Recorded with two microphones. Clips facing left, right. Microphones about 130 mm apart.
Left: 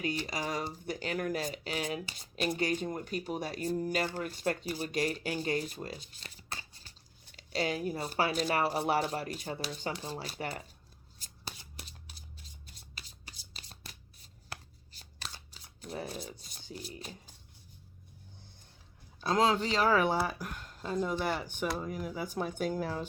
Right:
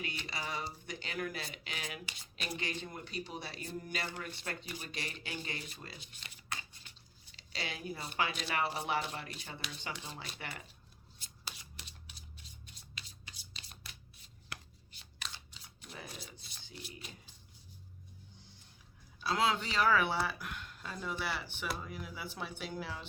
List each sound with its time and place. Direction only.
0.0 s speech: 40° left (ahead or behind)
11.2 s shuffling cards: 40° left (ahead or behind)
12.6 s a sound: 40° left (ahead or behind)
14.5 s shuffling cards: 35° left (ahead or behind)
19.2 s speech: 40° left (ahead or behind)